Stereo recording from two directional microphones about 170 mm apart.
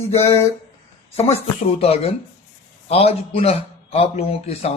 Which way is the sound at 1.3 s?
35° left (ahead or behind).